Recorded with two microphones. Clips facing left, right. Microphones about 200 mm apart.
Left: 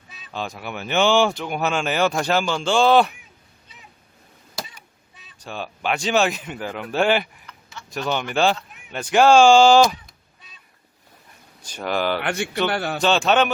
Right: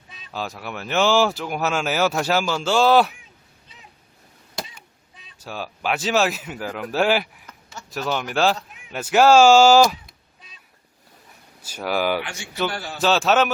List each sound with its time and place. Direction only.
0.1 s speech: centre (ahead or behind)
5.4 s speech: 5° right (ahead or behind)
7.4 s a sound: 45° right (ahead or behind)
7.9 s speech: 5° right (ahead or behind)
11.6 s speech: 5° right (ahead or behind)
12.2 s speech: 60° left (ahead or behind)
13.0 s speech: 5° right (ahead or behind)